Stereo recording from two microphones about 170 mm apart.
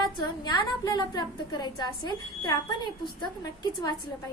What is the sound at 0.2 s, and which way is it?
A woman's voice, 25° left (ahead or behind).